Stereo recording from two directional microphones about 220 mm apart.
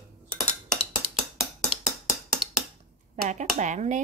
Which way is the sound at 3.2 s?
35° right (ahead or behind).